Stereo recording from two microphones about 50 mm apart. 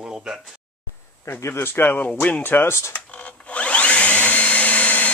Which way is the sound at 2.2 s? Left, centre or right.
Left.